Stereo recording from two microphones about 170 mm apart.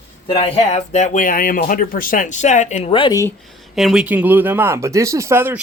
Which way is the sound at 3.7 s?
Centre (ahead or behind).